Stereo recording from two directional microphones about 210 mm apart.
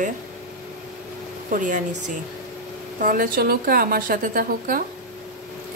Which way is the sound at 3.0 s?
40° right (ahead or behind).